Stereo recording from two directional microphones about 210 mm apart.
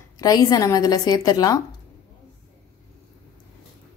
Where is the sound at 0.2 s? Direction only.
15° left (ahead or behind).